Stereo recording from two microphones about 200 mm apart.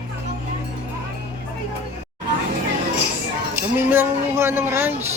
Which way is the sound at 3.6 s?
10° right (ahead or behind).